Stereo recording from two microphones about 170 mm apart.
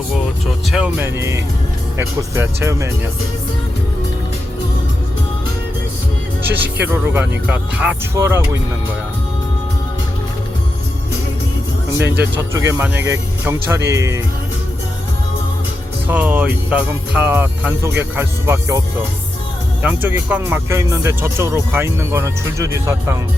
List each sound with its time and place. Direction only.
0.7 s speech: 5° right (ahead or behind)
6.5 s speech: 10° right (ahead or behind)
12.2 s speech: 15° right (ahead or behind)
16.0 s speech: 10° right (ahead or behind)
19.8 s speech: 10° right (ahead or behind)